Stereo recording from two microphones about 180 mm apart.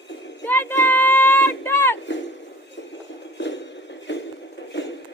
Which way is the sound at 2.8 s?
80° left.